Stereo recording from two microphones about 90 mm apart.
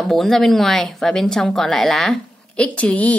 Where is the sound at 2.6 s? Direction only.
15° left (ahead or behind).